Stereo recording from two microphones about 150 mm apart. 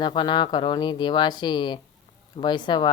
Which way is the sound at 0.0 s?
30° left (ahead or behind).